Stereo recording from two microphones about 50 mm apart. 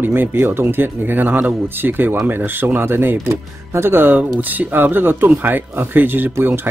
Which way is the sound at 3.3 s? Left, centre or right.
Right.